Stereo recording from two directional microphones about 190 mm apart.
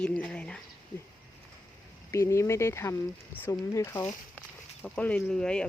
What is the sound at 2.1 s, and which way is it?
Speech, 15° left (ahead or behind).